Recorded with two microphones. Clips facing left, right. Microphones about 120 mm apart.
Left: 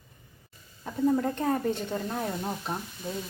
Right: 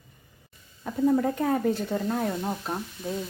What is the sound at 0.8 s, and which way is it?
Speech, centre (ahead or behind).